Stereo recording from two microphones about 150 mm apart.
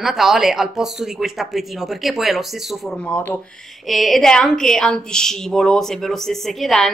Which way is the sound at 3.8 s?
Centre (ahead or behind).